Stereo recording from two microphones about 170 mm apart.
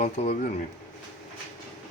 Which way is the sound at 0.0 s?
40° left (ahead or behind).